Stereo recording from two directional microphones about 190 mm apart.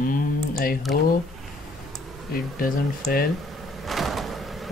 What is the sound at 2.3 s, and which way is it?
Speech, 50° left (ahead or behind).